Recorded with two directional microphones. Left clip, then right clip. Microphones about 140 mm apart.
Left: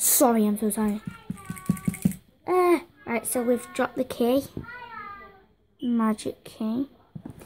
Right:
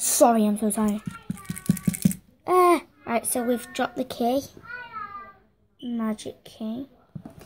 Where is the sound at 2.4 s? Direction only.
5° right (ahead or behind).